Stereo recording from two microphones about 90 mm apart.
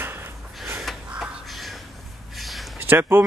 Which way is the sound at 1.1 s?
5° right (ahead or behind).